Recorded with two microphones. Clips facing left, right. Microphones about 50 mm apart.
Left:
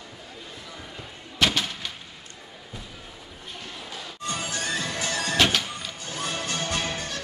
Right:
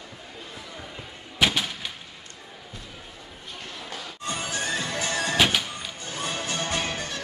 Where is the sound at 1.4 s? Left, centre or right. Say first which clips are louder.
Even; centre.